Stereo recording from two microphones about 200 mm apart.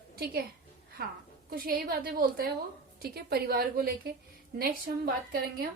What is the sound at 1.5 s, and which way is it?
A woman's voice, 45° right (ahead or behind).